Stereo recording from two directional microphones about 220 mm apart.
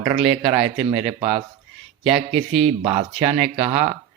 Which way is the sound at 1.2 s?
25° right (ahead or behind).